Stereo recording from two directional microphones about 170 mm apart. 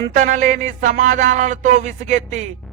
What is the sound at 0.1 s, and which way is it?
A man's voice, 50° right (ahead or behind).